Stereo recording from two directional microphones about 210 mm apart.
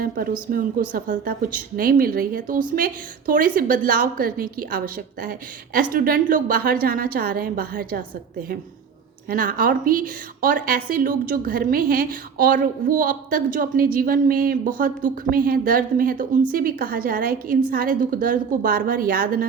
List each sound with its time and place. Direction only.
0.0 s a woman's voice: 45° right (ahead or behind)